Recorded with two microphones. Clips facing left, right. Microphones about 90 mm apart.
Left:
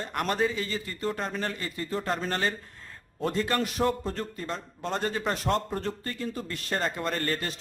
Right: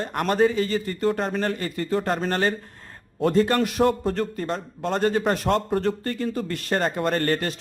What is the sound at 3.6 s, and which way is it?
A man's voice, 65° right (ahead or behind).